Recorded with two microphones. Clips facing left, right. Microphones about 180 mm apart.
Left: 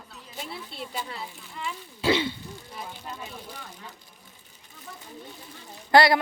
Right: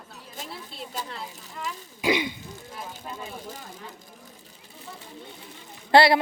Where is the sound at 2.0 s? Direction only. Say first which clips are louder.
Left 1 dB; 15° right (ahead or behind).